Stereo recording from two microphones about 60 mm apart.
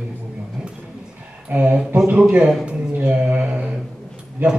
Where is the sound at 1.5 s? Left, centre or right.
Right.